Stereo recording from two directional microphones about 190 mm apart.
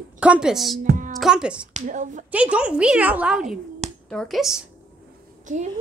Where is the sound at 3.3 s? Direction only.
40° right (ahead or behind).